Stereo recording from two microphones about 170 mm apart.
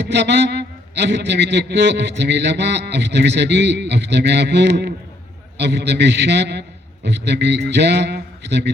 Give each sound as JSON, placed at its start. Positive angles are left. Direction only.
{"t": 0.0, "sound": "a man's voice", "side_deg": -90}